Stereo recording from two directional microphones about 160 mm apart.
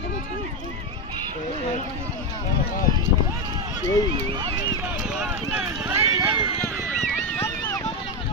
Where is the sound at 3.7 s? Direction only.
25° right (ahead or behind).